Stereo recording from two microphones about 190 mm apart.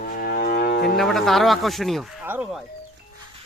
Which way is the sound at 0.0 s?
50° left (ahead or behind).